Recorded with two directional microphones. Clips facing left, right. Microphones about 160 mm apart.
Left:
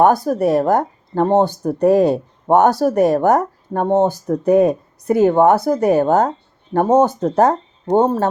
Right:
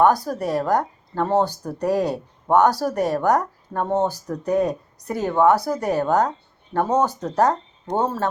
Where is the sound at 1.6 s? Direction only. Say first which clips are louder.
Left 8 dB; 50° left (ahead or behind).